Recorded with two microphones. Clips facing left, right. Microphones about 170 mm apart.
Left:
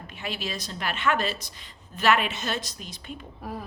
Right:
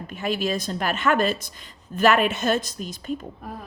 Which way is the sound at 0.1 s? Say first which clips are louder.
Right 9 dB; 45° right (ahead or behind).